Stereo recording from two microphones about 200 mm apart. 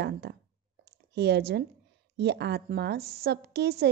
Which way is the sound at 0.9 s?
55° right (ahead or behind).